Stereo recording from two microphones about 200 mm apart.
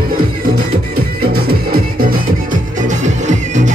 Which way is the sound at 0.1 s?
45° right (ahead or behind).